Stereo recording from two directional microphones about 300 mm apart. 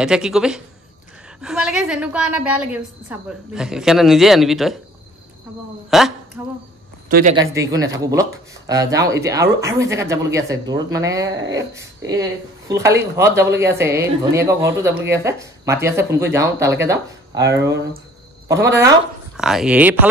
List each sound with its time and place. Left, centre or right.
0.0 s a woman's voice: centre
5.9 s a woman's voice: centre
7.1 s speech: right
7.5 s speech: centre